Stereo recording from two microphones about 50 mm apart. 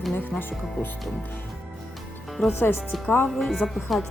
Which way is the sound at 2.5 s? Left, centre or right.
Left.